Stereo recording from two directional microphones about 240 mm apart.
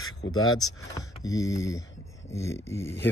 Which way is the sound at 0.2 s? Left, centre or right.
Left.